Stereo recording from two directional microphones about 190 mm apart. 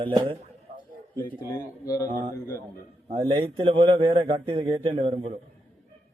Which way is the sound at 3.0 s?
30° right (ahead or behind).